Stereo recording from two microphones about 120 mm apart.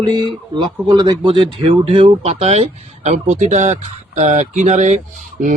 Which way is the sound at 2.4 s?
65° right (ahead or behind).